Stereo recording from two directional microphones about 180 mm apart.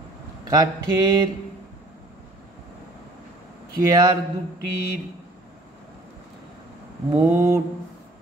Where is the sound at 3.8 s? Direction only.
20° right (ahead or behind).